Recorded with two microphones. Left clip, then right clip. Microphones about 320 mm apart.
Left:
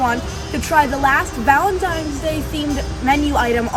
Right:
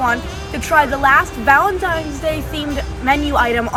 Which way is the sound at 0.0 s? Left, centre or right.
Centre.